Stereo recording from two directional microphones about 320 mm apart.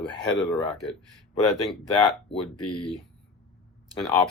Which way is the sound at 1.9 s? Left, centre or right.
Centre.